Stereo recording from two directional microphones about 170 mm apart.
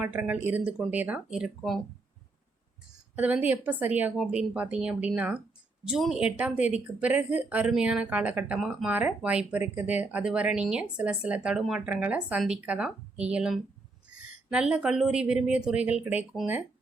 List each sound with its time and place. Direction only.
0.0 s a woman's voice: 10° right (ahead or behind)
3.2 s a woman's voice: 10° right (ahead or behind)